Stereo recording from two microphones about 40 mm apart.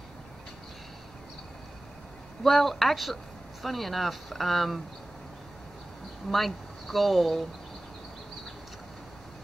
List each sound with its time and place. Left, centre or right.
2.4 s speech: centre
6.2 s speech: centre